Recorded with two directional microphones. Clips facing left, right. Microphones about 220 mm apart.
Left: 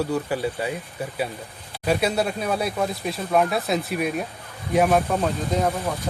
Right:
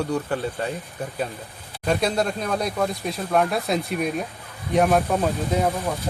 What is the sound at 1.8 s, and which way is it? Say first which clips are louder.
Speech: even; 5° left (ahead or behind).